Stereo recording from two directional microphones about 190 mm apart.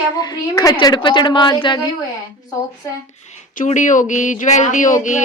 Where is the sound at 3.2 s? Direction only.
40° left (ahead or behind).